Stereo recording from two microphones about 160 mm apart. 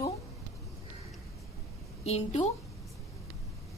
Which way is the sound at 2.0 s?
45° left (ahead or behind).